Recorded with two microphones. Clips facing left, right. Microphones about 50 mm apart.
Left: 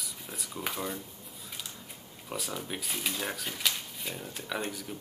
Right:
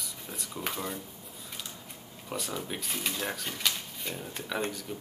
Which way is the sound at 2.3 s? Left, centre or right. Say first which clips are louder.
Right 1 dB; centre.